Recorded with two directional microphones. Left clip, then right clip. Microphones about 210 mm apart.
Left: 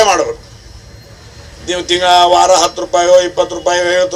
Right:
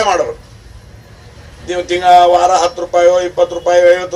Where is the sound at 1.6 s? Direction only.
35° left (ahead or behind).